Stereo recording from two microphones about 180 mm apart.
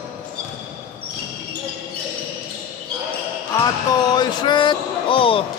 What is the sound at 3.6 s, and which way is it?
Basketball bounce, 20° left (ahead or behind).